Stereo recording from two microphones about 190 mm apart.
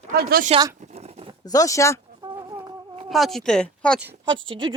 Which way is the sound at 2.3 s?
20° right (ahead or behind).